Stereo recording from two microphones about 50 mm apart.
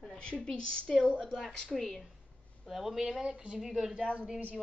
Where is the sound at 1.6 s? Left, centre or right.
Centre.